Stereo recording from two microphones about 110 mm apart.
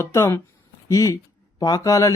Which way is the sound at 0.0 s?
25° left (ahead or behind).